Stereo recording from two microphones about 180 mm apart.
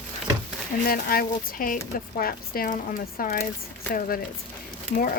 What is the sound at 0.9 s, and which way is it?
Speech, 55° left (ahead or behind).